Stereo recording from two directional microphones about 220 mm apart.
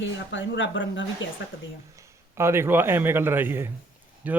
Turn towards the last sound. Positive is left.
turn(degrees=-5)  # may be behind; listen again after turning